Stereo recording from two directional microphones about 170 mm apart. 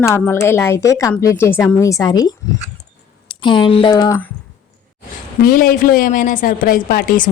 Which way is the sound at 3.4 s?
30° left (ahead or behind).